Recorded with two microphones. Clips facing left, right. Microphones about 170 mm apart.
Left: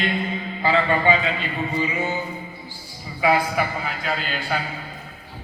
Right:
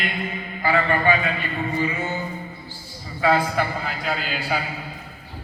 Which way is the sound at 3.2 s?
10° left (ahead or behind).